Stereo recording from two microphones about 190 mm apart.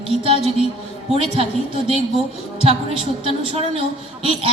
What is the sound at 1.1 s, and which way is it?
Speech, 30° right (ahead or behind).